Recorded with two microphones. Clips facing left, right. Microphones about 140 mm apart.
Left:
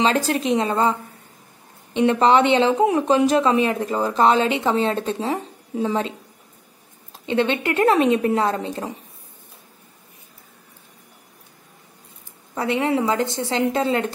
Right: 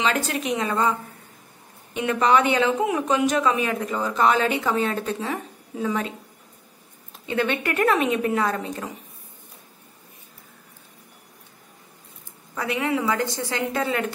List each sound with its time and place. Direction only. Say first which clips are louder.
0.0 s a woman's voice: left 5 dB; 35° left (ahead or behind)
2.0 s speech: left 4 dB; 30° left (ahead or behind)
7.2 s speech: left 4 dB; 25° left (ahead or behind)
12.5 s speech: left 4 dB; 30° left (ahead or behind)